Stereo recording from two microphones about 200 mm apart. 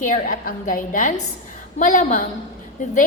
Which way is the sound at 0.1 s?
45° left (ahead or behind).